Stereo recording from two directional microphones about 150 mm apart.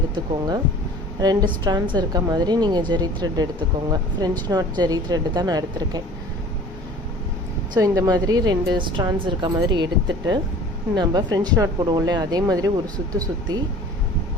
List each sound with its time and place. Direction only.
0.1 s a woman's voice: 25° right (ahead or behind)
7.8 s a woman's voice: 25° right (ahead or behind)